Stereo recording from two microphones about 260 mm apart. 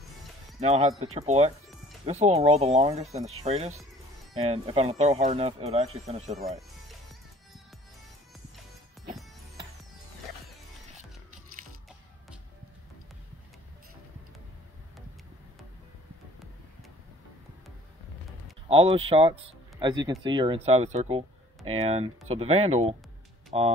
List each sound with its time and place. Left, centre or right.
0.6 s speech: right
18.7 s speech: right